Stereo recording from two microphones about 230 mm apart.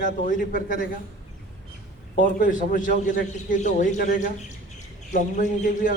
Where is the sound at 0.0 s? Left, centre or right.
Left.